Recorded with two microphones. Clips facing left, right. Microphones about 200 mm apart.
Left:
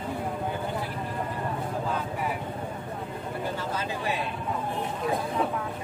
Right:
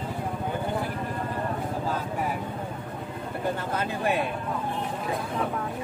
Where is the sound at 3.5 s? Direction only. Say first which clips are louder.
Right 2 dB; 55° right (ahead or behind).